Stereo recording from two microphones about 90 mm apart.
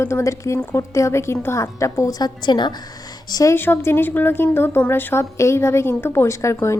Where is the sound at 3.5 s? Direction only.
25° left (ahead or behind).